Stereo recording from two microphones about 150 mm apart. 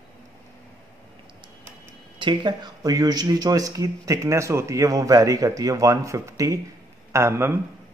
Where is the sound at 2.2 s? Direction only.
30° right (ahead or behind).